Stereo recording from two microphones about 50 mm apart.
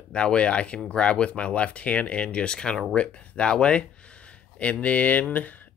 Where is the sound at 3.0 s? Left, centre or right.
Left.